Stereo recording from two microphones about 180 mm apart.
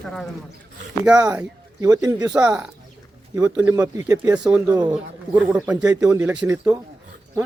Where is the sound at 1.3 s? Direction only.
10° right (ahead or behind).